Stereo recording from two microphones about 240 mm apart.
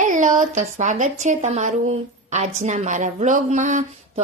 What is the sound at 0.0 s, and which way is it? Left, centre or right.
Speech, right.